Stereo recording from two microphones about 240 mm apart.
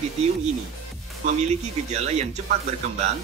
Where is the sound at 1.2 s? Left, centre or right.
Right.